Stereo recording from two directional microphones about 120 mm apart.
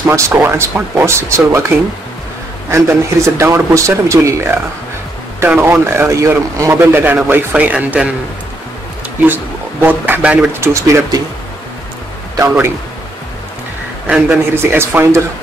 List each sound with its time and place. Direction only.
0.0 s speech: 25° right (ahead or behind)
2.7 s a man's voice: 25° right (ahead or behind)
9.2 s speech: 15° right (ahead or behind)
10.7 s speech: 25° right (ahead or behind)
14.0 s a man's voice: 5° right (ahead or behind)
14.5 s speech: 20° right (ahead or behind)